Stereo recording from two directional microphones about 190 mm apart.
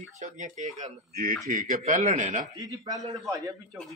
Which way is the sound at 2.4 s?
20° right (ahead or behind).